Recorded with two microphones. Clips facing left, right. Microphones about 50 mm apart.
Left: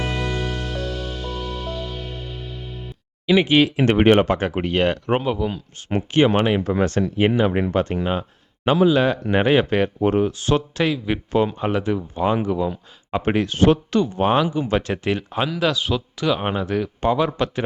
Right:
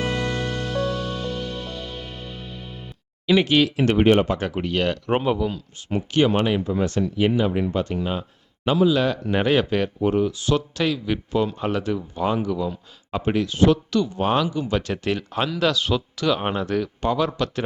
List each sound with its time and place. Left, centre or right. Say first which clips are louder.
0.0 s music: even; centre
3.2 s speech: left 2 dB; centre
3.9 s speech: left 2 dB; left
4.4 s speech: left 3 dB; left
5.1 s speech: right 4 dB; centre
5.4 s speech: left 1 dB; centre
6.7 s speech: left 3 dB; left
7.2 s speech: left 2 dB; left
9.3 s speech: left 2 dB; left
10.0 s speech: left 2 dB; left
10.8 s speech: left 1 dB; centre
12.4 s speech: left 3 dB; left
13.2 s speech: left 1 dB; left; by 17.7 s centre